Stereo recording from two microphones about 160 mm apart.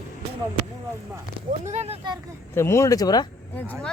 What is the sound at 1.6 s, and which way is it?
Speech, 45° right (ahead or behind).